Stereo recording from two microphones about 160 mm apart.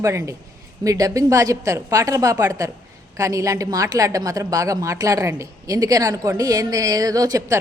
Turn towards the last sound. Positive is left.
turn(degrees=-20)  # may be behind; listen again after turning